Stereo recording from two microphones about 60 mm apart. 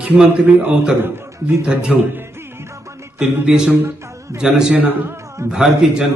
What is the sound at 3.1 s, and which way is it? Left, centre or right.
Music, centre.